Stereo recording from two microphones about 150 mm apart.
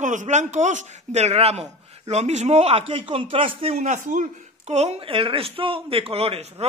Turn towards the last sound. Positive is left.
turn(degrees=-40)  # may be behind; listen again after turning